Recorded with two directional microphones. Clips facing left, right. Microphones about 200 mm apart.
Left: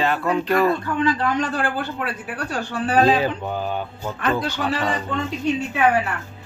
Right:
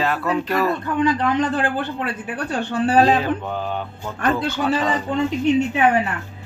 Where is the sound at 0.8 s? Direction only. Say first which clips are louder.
Right 2 dB; 20° right (ahead or behind).